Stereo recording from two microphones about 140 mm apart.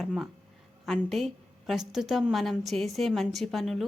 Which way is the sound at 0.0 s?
Centre (ahead or behind).